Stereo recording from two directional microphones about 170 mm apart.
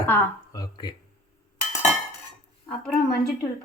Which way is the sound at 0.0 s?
15° left (ahead or behind).